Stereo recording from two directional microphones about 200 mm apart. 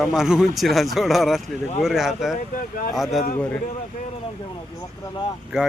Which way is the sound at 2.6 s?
40° left (ahead or behind).